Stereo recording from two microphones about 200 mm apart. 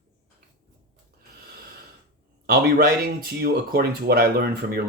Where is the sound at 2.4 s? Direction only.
45° right (ahead or behind).